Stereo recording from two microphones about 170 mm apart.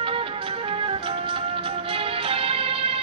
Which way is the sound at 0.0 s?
30° right (ahead or behind).